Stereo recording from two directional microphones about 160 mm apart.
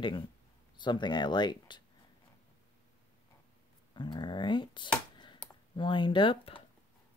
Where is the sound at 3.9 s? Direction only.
30° left (ahead or behind).